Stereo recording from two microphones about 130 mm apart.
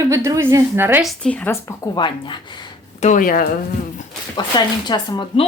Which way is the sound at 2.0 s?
40° left (ahead or behind).